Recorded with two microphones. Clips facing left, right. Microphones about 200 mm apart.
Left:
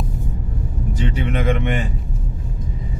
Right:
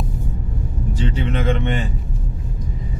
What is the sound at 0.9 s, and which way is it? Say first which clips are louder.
Vehicle: even; 15° left (ahead or behind).